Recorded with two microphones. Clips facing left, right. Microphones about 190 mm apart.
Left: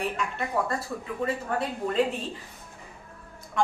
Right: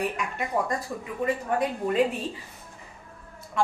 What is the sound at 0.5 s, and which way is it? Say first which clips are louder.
A woman's voice: right 1 dB; 15° right (ahead or behind).